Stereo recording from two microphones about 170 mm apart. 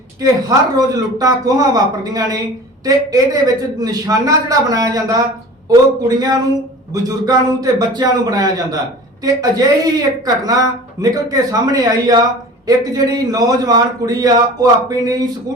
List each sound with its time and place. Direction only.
0.2 s a man's voice: 20° right (ahead or behind)